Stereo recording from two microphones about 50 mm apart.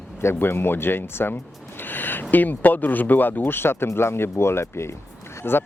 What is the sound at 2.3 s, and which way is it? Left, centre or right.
Speech, left.